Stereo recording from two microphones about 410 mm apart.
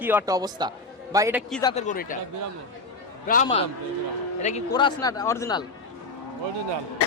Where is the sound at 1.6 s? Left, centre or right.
Centre.